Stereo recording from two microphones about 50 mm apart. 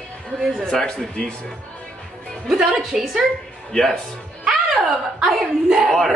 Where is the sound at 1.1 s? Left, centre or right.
Left.